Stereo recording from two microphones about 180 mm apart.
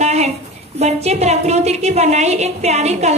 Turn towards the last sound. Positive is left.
turn(degrees=-40)  # may be behind; listen again after turning